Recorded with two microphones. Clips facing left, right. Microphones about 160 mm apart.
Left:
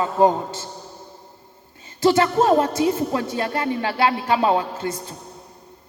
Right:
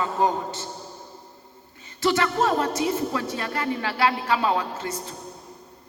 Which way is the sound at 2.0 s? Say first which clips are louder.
Left 5 dB; 30° left (ahead or behind).